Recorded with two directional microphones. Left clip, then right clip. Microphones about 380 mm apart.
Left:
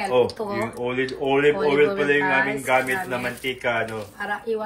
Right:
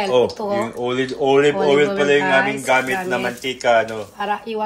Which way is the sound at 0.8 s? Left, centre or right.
Centre.